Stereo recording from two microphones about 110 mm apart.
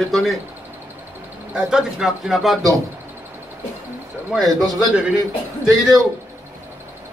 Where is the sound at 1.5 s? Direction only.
5° right (ahead or behind).